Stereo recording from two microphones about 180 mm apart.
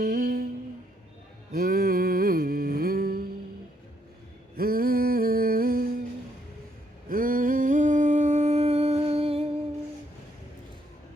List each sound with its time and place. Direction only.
0.0 s humming: 60° right (ahead or behind)
1.5 s a sound: 55° right (ahead or behind)
4.5 s humming: 55° right (ahead or behind)
7.1 s humming: 50° right (ahead or behind); by 9.5 s 35° right (ahead or behind)